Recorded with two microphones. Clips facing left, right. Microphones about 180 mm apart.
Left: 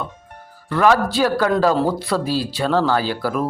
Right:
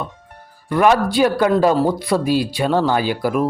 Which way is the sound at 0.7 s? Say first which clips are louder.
Right 1 dB; 15° right (ahead or behind).